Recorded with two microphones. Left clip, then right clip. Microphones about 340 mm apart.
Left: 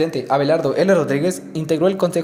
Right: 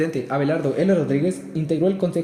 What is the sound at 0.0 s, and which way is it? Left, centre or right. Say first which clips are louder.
Speech: left 5 dB; centre.